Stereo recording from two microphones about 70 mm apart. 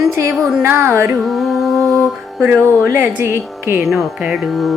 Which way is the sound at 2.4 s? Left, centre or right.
Right.